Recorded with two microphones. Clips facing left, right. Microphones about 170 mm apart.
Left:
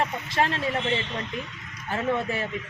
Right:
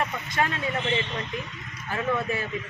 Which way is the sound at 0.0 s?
30° left (ahead or behind).